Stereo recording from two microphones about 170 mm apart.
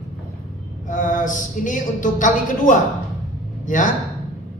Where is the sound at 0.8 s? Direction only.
50° left (ahead or behind).